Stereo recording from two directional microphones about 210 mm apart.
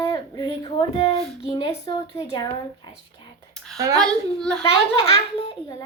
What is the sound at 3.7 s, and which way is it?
Speech, 15° right (ahead or behind).